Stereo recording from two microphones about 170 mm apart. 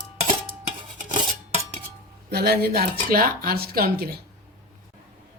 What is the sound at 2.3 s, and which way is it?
Speech, 70° right (ahead or behind).